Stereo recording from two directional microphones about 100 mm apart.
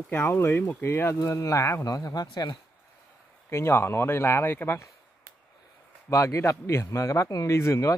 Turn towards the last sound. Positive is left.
turn(degrees=30)  # may be behind; listen again after turning